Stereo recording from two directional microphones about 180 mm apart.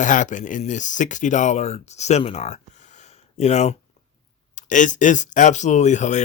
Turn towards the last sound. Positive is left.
turn(degrees=40)  # may be behind; listen again after turning